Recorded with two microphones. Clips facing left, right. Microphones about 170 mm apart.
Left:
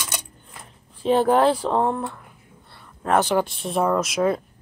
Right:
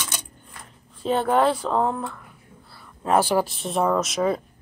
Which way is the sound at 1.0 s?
10° left (ahead or behind).